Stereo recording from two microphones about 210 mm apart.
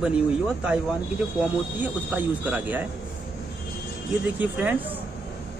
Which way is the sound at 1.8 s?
5° right (ahead or behind).